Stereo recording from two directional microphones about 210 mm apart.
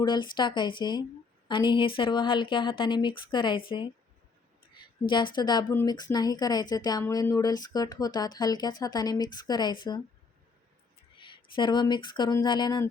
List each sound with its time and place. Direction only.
0.0 s speech: 20° left (ahead or behind)
5.0 s speech: 20° left (ahead or behind)
11.2 s speech: 20° left (ahead or behind)